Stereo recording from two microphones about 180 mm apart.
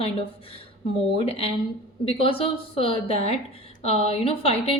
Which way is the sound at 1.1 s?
30° left (ahead or behind).